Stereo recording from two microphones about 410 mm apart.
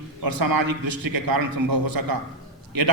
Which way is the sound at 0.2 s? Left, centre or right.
Right.